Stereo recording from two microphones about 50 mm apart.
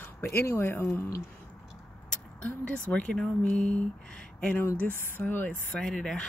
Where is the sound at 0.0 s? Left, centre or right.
Left.